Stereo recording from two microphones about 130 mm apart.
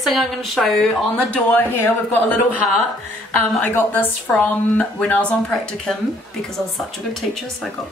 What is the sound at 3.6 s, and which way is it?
A woman's voice, 15° left (ahead or behind).